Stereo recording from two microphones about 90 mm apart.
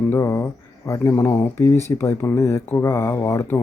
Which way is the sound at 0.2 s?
30° left (ahead or behind).